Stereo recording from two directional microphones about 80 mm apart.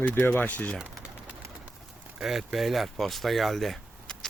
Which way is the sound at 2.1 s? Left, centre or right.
Centre.